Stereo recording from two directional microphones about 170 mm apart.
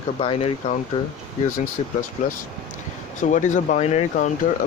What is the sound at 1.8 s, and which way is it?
Speech, 40° left (ahead or behind).